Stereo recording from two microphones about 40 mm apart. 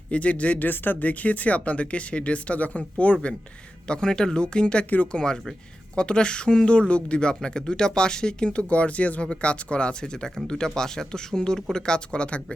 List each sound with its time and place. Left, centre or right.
0.1 s speech: left
0.7 s speech: left
1.2 s speech: left
3.8 s speech: left